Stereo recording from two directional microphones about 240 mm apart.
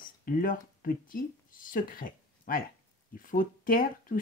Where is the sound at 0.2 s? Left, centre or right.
Left.